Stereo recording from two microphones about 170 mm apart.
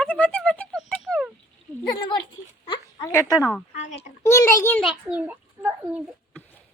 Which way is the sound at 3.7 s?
45° left (ahead or behind).